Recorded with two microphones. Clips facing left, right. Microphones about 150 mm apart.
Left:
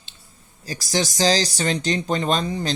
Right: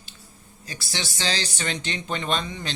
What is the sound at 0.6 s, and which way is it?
Speech, 40° left (ahead or behind).